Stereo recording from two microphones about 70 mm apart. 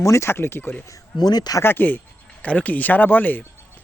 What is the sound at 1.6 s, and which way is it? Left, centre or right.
Speech, left.